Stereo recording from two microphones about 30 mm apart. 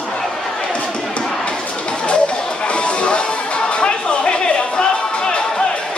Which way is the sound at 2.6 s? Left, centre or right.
Left.